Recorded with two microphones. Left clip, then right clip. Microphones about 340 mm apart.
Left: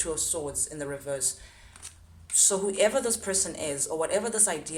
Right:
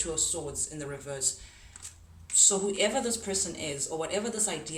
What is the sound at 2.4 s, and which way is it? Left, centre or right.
Speech, centre.